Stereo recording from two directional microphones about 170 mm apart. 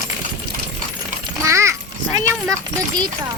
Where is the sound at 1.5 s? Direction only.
15° right (ahead or behind).